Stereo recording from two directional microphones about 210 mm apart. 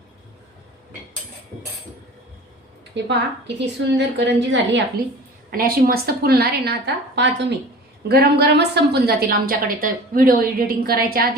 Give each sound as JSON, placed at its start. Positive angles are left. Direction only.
{"t": 2.9, "sound": "a woman's voice", "side_deg": -55}
{"t": 5.5, "sound": "a woman's voice", "side_deg": -45}